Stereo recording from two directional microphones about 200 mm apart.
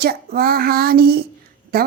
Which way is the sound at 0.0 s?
50° right (ahead or behind).